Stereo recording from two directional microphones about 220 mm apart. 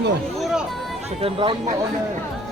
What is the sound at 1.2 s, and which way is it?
Speech, 25° right (ahead or behind).